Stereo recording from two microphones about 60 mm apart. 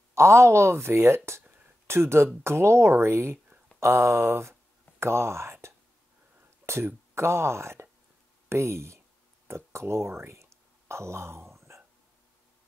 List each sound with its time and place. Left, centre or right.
0.1 s speech: right
11.5 s hiccup: right